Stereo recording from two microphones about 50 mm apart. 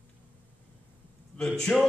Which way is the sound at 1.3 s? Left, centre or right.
Centre.